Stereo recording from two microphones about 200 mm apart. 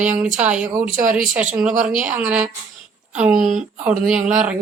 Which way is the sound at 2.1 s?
10° right (ahead or behind).